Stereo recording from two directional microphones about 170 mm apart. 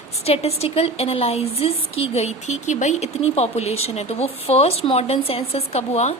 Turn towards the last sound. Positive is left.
turn(degrees=40)  # may be behind; listen again after turning